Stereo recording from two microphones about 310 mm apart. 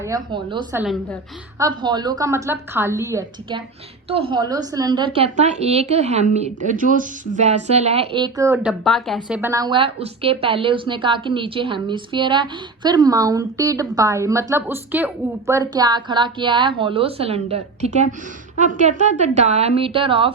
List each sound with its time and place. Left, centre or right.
0.0 s a woman's voice: centre